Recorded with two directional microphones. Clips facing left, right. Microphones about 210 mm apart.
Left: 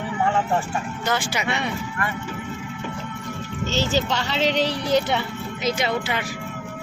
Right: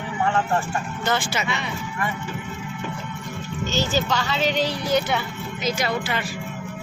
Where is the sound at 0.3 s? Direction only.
10° left (ahead or behind).